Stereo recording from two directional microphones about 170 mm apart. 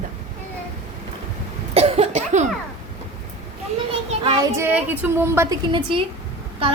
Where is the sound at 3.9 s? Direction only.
35° right (ahead or behind).